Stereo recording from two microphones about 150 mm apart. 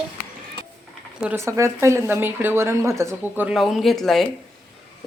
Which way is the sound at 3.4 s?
Centre (ahead or behind).